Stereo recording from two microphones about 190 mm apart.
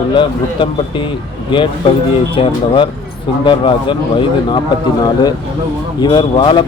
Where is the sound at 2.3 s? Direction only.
25° left (ahead or behind).